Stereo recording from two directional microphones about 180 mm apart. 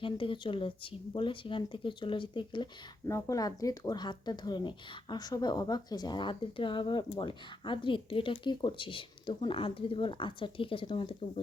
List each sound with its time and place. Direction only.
0.0 s speech: 30° left (ahead or behind)
3.1 s speech: 15° left (ahead or behind)